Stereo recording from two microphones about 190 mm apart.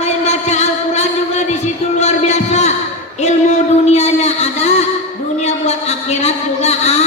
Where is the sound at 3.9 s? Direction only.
35° left (ahead or behind).